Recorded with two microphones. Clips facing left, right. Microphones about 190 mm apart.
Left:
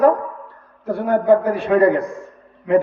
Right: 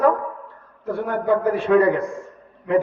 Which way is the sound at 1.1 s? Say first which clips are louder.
Left 5 dB; 40° left (ahead or behind).